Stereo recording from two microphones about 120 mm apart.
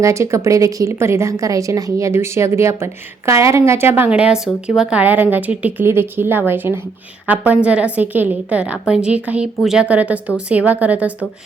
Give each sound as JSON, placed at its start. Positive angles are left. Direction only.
{"t": 0.0, "sound": "a woman's voice", "side_deg": -25}